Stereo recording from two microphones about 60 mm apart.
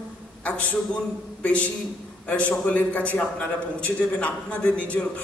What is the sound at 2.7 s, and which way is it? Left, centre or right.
A man's voice, left.